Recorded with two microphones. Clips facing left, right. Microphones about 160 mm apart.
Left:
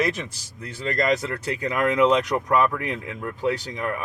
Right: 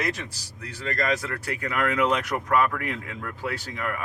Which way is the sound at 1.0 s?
20° left (ahead or behind).